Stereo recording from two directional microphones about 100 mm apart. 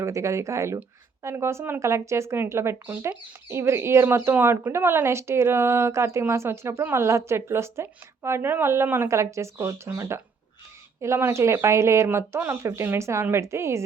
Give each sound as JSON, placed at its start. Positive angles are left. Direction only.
{"t": 0.0, "sound": "speech", "side_deg": -30}